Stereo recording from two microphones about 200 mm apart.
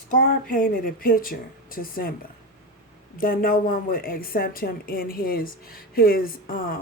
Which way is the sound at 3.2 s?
45° left (ahead or behind).